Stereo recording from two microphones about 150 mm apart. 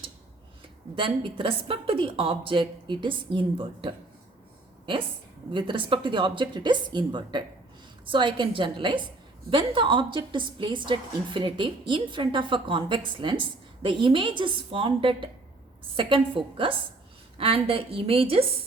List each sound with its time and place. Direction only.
0.9 s a woman's voice: 35° right (ahead or behind)
5.5 s a woman's voice: 35° right (ahead or behind)